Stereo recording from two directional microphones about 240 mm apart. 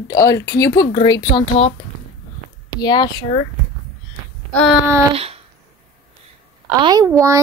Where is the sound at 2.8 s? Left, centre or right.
Centre.